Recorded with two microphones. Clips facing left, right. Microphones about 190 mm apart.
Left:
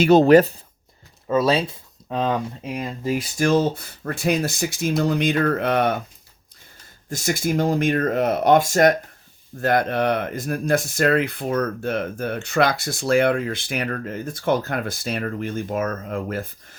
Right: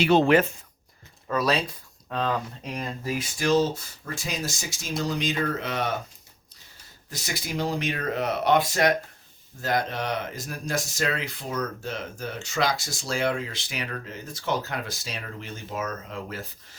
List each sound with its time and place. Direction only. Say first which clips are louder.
0.0 s speech: left 7 dB; 40° left (ahead or behind)
1.3 s speech: left 6 dB; 25° left (ahead or behind)
3.3 s speech: left 3 dB; 50° left (ahead or behind)
7.1 s speech: left 10 dB; 50° left (ahead or behind)
9.6 s speech: left 7 dB; 60° left (ahead or behind)